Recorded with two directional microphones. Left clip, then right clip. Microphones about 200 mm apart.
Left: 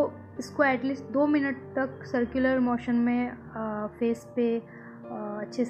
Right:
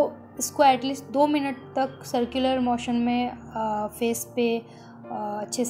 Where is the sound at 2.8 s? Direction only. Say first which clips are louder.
Right 2 dB; 30° left (ahead or behind).